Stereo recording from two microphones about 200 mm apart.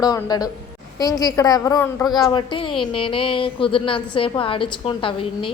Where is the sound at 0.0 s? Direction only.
20° left (ahead or behind).